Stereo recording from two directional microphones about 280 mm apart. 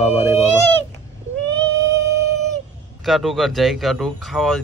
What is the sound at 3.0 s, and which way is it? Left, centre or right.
A man's voice, centre.